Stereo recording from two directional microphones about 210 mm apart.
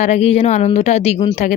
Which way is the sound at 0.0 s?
30° left (ahead or behind).